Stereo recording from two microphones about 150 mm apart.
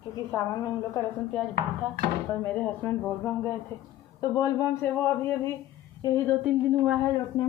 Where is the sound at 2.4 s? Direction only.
10° left (ahead or behind).